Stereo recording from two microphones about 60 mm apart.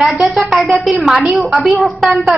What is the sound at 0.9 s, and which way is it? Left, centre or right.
A woman's voice, centre.